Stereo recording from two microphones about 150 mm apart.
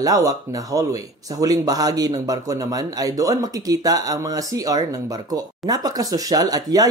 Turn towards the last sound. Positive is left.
turn(degrees=-25)  # may be behind; listen again after turning